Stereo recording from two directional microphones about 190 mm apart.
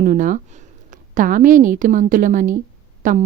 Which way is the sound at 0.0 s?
45° right (ahead or behind).